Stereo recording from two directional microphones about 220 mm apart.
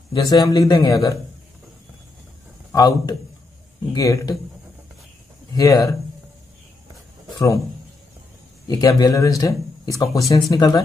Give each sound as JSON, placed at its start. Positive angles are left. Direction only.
{"t": 0.1, "sound": "a man's voice", "side_deg": 20}
{"t": 2.7, "sound": "speech", "side_deg": 15}
{"t": 5.5, "sound": "speech", "side_deg": 15}
{"t": 7.3, "sound": "a man's voice", "side_deg": 15}
{"t": 8.6, "sound": "speech", "side_deg": 15}